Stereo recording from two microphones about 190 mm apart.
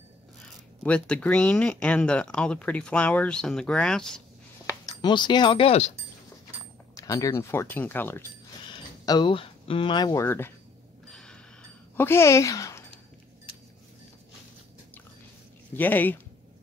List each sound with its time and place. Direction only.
0.8 s speech: 5° left (ahead or behind)
4.8 s speech: 25° left (ahead or behind)
7.0 s speech: 15° left (ahead or behind)
9.0 s speech: 20° left (ahead or behind)
11.1 s mechanisms: 5° left (ahead or behind)
12.0 s speech: 15° left (ahead or behind)
15.7 s speech: 10° left (ahead or behind)